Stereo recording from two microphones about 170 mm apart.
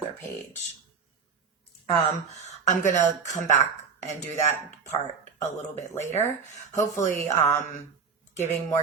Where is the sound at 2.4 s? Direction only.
45° left (ahead or behind).